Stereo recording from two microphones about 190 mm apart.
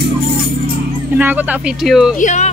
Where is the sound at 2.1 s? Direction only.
40° left (ahead or behind).